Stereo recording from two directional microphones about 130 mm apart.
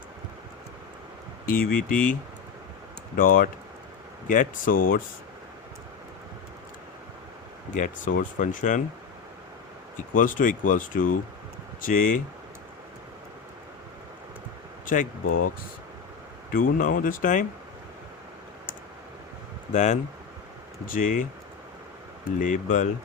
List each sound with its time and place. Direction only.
1.5 s speech: 90° left
3.2 s speech: 90° left
7.7 s speech: 85° left
10.2 s speech: 90° left
14.8 s speech: 90° left
16.5 s speech: 90° left
19.7 s speech: 65° left (ahead or behind)
20.8 s speech: 90° left